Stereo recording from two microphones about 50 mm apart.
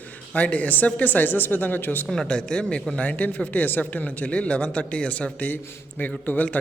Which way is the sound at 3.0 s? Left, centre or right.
Left.